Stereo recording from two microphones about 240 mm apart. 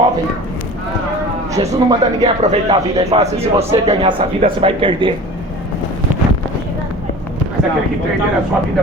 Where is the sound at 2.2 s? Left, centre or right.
Right.